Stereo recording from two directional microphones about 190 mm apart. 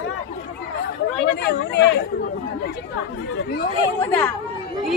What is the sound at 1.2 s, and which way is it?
Speech, 60° left (ahead or behind).